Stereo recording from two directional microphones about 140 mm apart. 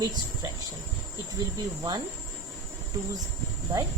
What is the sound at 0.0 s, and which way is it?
Speech, 25° right (ahead or behind).